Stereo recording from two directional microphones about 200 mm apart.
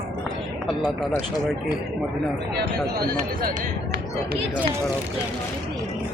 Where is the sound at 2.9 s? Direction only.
50° right (ahead or behind).